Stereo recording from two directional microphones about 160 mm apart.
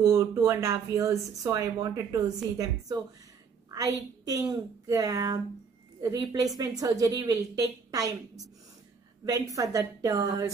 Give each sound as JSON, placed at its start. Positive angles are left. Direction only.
{"t": 0.0, "sound": "speech", "side_deg": -15}
{"t": 4.2, "sound": "speech", "side_deg": -25}